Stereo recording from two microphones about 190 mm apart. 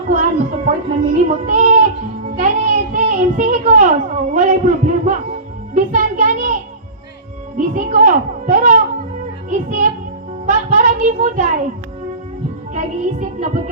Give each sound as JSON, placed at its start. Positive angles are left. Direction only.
{"t": 0.1, "sound": "a child's voice", "side_deg": -35}
{"t": 7.6, "sound": "a child's voice", "side_deg": -40}
{"t": 10.4, "sound": "child singing", "side_deg": -40}
{"t": 12.7, "sound": "music", "side_deg": -35}